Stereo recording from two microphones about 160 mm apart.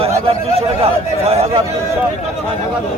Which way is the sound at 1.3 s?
40° right (ahead or behind).